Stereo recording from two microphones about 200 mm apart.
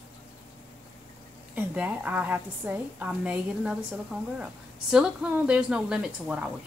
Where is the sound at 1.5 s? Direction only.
5° right (ahead or behind).